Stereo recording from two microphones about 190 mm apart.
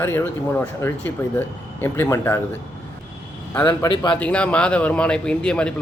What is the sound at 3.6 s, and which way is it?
Speech, 20° left (ahead or behind).